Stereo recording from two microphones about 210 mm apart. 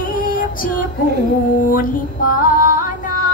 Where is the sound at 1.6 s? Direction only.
40° left (ahead or behind).